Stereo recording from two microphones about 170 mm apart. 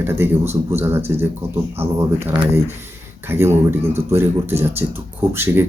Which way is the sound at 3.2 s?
15° right (ahead or behind).